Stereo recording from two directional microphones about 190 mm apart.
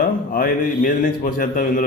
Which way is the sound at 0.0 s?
50° left (ahead or behind).